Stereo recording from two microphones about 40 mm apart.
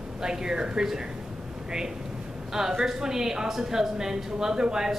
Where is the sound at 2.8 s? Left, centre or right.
Centre.